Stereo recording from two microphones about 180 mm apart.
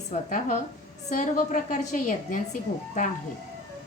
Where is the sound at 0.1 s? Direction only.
45° left (ahead or behind).